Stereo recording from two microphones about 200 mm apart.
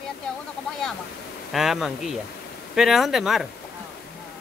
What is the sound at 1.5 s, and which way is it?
Speech, centre (ahead or behind).